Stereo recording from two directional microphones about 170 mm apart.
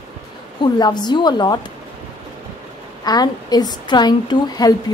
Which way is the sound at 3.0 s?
25° left (ahead or behind).